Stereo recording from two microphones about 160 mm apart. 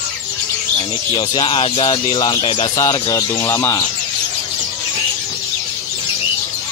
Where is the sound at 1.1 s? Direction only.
30° left (ahead or behind).